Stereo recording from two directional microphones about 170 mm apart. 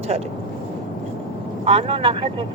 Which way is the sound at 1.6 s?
35° right (ahead or behind).